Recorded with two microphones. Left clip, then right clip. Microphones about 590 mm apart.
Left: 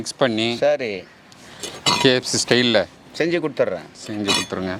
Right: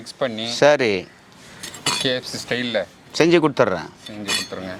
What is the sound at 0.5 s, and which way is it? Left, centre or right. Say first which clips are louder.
Speech: right 4 dB; right.